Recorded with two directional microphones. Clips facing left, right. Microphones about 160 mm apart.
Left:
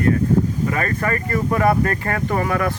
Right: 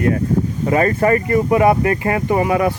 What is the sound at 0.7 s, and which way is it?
Speech, 25° right (ahead or behind).